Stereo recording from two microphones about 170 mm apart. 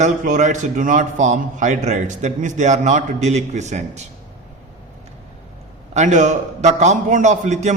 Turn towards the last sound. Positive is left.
turn(degrees=-45)  # may be behind; listen again after turning